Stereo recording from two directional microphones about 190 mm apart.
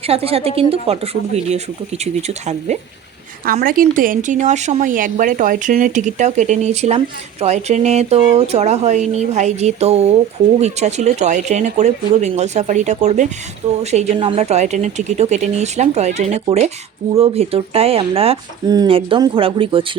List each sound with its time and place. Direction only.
0.1 s a woman's voice: 30° right (ahead or behind)
3.4 s a woman's voice: 50° right (ahead or behind); by 19.8 s 30° right (ahead or behind)